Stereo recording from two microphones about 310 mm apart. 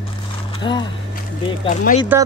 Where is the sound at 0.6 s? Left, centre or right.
Centre.